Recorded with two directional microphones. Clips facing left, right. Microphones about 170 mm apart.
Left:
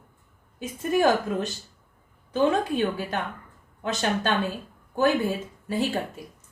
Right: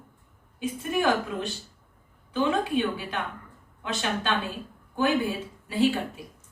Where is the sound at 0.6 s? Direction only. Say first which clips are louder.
Left 4 dB; 40° left (ahead or behind).